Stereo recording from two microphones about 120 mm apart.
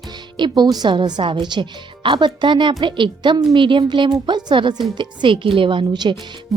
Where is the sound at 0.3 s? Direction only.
40° right (ahead or behind).